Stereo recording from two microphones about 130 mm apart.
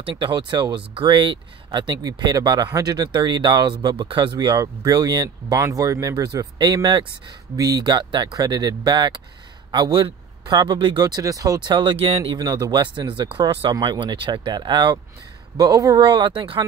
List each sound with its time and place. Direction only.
0.0 s speech: 40° right (ahead or behind)
12.4 s speech: 30° right (ahead or behind)